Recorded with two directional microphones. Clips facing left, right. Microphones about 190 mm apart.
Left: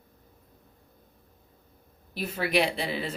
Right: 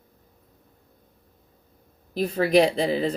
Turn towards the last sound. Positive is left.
turn(degrees=-40)  # may be behind; listen again after turning